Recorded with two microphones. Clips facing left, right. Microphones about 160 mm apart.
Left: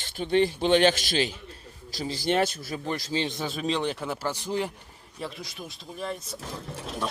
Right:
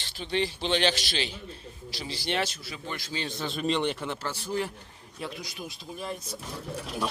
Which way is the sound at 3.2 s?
20° left (ahead or behind).